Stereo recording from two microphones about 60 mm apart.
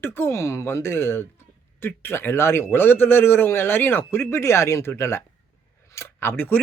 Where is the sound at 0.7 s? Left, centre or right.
Left.